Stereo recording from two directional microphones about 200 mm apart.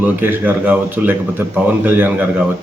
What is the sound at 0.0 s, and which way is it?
Speech, 10° right (ahead or behind).